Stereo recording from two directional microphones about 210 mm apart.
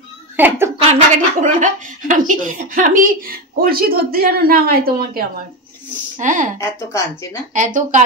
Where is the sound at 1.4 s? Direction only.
35° right (ahead or behind).